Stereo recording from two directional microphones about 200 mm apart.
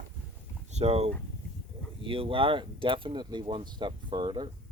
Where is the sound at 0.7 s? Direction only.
30° right (ahead or behind).